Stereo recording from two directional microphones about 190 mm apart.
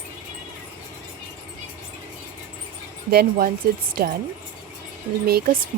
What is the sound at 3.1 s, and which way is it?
Speech, 55° right (ahead or behind).